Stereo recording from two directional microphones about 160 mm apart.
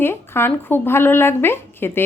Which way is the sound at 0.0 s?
15° left (ahead or behind).